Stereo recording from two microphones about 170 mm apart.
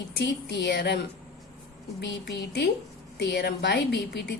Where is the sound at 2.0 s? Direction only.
80° left.